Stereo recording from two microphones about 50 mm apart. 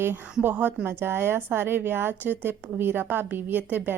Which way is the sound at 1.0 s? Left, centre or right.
Right.